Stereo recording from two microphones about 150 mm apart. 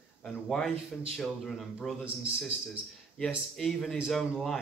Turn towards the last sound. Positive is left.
turn(degrees=0)  # may be behind; listen again after turning